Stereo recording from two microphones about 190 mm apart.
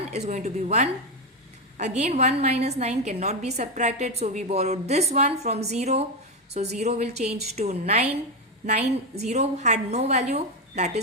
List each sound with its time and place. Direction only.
0.1 s a woman's voice: 35° right (ahead or behind)
2.0 s a woman's voice: 35° right (ahead or behind)